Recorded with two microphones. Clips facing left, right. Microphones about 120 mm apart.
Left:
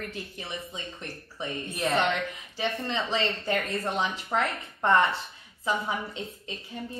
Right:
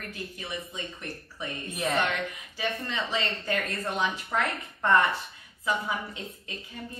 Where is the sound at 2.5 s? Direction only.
30° left (ahead or behind).